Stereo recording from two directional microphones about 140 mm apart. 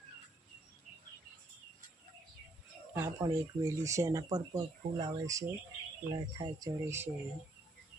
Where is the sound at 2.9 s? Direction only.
15° right (ahead or behind).